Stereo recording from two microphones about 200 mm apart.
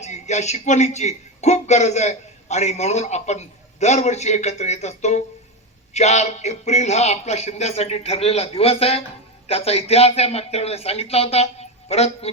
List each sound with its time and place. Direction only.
0.0 s a man's voice: 35° left (ahead or behind)